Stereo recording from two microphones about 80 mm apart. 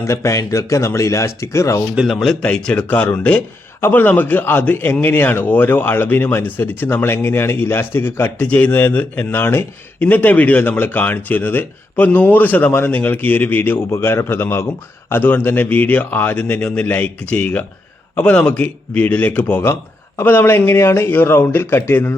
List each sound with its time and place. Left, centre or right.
0.0 s speech: left
2.0 s speech: centre; by 8.3 s left
8.4 s speech: centre
16.6 s speech: centre; by 22.1 s left